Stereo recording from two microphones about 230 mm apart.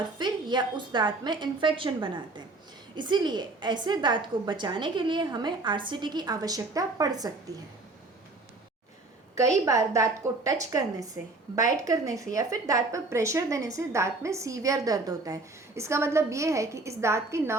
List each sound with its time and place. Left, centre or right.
0.2 s a woman's voice: centre
9.3 s a woman's voice: centre